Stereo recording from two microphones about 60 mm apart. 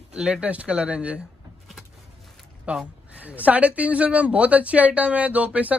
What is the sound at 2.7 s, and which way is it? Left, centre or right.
Speech, right.